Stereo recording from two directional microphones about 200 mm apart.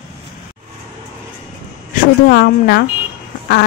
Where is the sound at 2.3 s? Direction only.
55° left (ahead or behind).